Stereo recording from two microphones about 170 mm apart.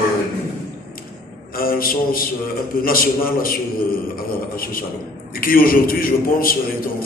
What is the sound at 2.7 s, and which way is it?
A man's voice, 55° left (ahead or behind).